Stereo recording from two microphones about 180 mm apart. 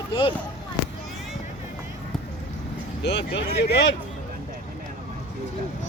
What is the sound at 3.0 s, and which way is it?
Speech, 75° left (ahead or behind).